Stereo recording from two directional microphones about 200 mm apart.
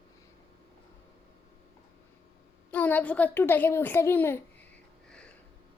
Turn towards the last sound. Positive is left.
turn(degrees=5)  # may be behind; listen again after turning